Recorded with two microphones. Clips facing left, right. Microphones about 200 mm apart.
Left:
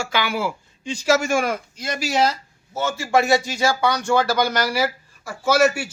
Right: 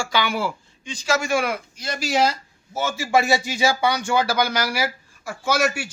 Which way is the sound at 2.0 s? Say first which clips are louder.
Even; centre (ahead or behind).